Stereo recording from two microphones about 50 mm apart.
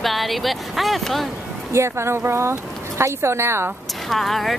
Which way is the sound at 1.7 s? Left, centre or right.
Right.